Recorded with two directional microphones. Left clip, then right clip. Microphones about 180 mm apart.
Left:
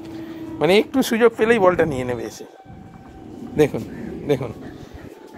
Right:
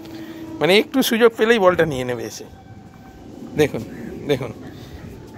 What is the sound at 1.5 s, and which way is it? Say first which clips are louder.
Speech: right 1 dB; centre (ahead or behind).